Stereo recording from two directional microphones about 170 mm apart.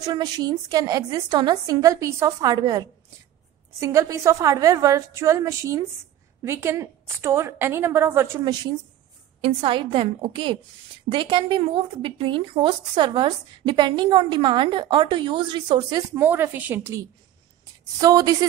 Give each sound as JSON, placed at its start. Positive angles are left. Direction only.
{"t": 0.0, "sound": "speech", "side_deg": -25}
{"t": 3.8, "sound": "a woman's voice", "side_deg": -20}
{"t": 9.4, "sound": "a woman's voice", "side_deg": -30}
{"t": 16.2, "sound": "a woman's voice", "side_deg": -10}
{"t": 18.0, "sound": "speech", "side_deg": -20}